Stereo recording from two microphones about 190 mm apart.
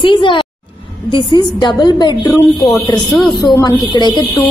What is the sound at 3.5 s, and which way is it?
Speech, 20° left (ahead or behind).